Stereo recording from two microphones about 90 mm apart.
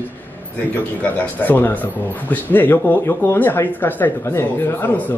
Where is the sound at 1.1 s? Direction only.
15° left (ahead or behind).